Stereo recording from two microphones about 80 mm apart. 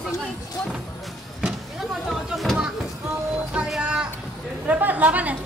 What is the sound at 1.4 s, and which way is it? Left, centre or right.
Speech, centre.